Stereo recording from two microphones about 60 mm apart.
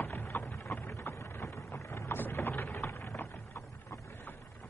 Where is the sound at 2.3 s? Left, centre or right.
Left.